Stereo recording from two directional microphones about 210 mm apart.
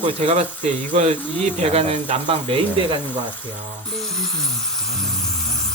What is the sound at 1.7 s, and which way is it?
Speech, 30° right (ahead or behind).